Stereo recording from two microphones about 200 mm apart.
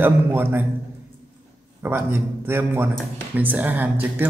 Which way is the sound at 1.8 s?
10° right (ahead or behind).